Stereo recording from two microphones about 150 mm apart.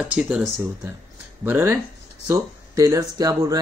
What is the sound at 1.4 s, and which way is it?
Speech, 15° right (ahead or behind).